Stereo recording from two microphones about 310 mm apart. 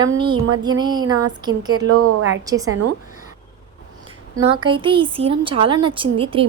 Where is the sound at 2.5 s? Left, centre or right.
Centre.